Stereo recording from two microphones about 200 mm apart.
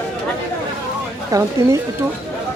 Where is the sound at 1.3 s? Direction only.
15° right (ahead or behind).